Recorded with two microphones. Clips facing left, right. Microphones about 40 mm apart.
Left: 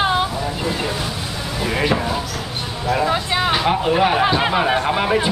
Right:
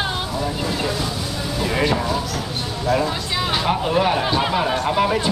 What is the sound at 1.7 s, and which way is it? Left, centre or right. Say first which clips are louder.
Speech: left 1 dB; centre.